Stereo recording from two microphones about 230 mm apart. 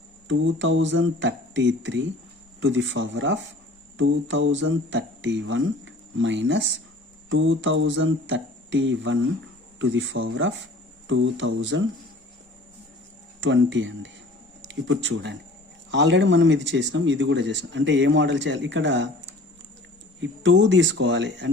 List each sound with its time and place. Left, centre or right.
0.3 s speech: right
13.4 s speech: right